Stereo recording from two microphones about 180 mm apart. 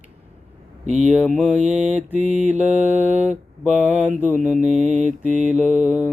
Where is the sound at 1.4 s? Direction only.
10° right (ahead or behind).